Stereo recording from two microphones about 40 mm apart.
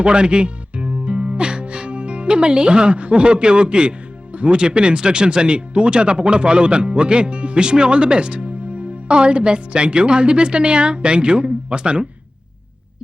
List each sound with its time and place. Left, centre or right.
0.0 s speech: right